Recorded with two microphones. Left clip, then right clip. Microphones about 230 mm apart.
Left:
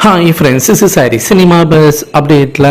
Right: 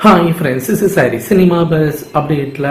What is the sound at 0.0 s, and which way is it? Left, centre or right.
A man's voice, left.